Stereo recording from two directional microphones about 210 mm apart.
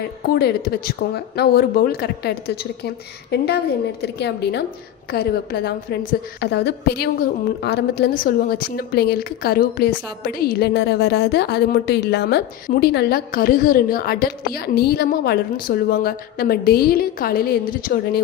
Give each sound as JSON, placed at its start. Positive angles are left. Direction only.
{"t": 0.2, "sound": "a woman's voice", "side_deg": 50}